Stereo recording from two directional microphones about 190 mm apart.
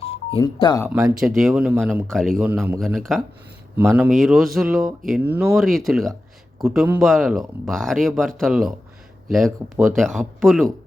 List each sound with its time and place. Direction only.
0.0 s music: 30° left (ahead or behind)
0.9 s speech: 5° right (ahead or behind)
2.4 s speech: 10° right (ahead or behind)
5.5 s speech: centre (ahead or behind)